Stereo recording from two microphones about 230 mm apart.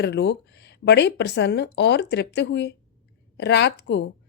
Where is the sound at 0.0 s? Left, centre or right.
Left.